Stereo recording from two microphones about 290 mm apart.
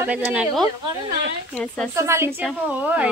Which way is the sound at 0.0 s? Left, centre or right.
Centre.